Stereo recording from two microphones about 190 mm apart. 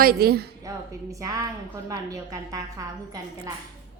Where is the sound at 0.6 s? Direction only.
15° right (ahead or behind).